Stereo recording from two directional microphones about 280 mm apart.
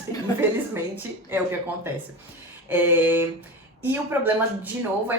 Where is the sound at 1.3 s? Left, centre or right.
Centre.